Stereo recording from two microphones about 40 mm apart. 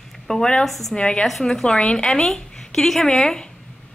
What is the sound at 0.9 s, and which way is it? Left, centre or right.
Speech, left.